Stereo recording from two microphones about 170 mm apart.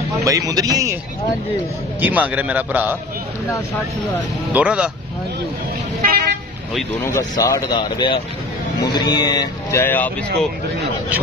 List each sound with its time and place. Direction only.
0.2 s speech: 20° right (ahead or behind)
2.0 s a man's voice: 10° right (ahead or behind)
4.5 s speech: 5° right (ahead or behind)
6.0 s vehicle: 65° right (ahead or behind)
7.0 s speech: 15° left (ahead or behind)